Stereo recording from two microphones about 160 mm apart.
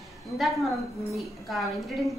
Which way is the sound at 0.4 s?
Centre (ahead or behind).